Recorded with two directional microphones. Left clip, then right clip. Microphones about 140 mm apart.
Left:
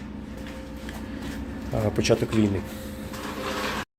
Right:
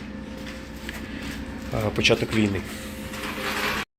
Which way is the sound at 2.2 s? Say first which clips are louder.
Even; 25° left (ahead or behind).